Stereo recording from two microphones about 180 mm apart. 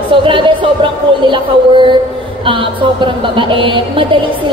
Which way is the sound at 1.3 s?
25° right (ahead or behind).